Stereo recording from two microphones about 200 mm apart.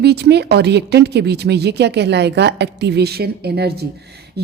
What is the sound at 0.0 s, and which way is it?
A woman's voice, 55° right (ahead or behind).